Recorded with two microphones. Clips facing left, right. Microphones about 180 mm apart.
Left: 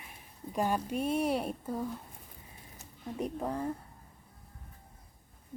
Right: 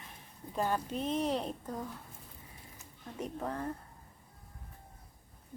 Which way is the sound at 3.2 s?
10° left (ahead or behind).